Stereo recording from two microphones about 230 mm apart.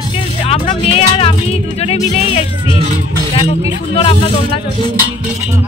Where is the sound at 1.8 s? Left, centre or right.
Left.